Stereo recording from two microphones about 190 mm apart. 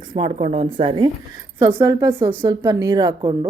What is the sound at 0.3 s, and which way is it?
Speech, 30° right (ahead or behind).